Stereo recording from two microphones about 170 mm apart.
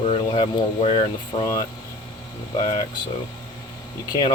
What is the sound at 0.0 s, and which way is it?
Speech, 30° left (ahead or behind).